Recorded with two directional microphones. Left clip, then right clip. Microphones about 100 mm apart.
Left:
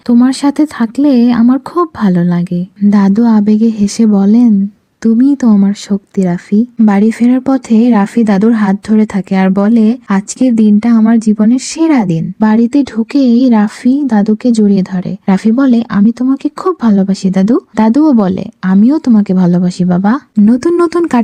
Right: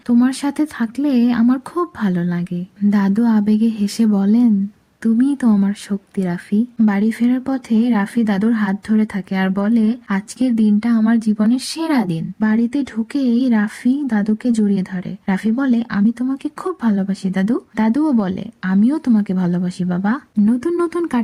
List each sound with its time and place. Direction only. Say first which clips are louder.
0.1 s speech: left 7 dB; 30° left (ahead or behind)
20.4 s speech: left 9 dB; 55° left (ahead or behind)